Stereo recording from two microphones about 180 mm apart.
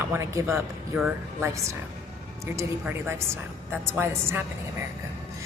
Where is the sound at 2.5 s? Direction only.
15° right (ahead or behind).